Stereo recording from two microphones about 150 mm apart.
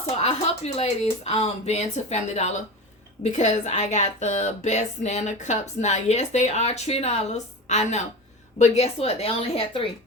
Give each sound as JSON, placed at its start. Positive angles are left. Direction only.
{"t": 0.2, "sound": "a woman's voice", "side_deg": 45}